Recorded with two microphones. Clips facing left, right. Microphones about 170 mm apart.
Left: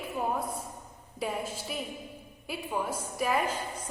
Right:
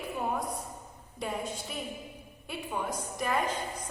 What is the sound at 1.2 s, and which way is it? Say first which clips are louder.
A woman's voice: left 1 dB; 5° left (ahead or behind).